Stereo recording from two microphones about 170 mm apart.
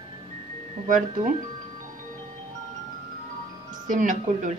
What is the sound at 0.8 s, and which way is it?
Speech, 50° right (ahead or behind).